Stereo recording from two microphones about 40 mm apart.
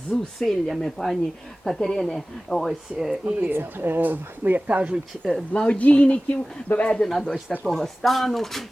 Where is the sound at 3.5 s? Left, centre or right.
Right.